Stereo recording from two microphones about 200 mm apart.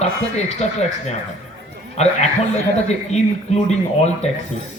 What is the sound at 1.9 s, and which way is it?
Speech, 35° left (ahead or behind).